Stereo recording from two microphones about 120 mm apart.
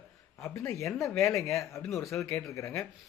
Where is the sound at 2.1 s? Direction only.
10° left (ahead or behind).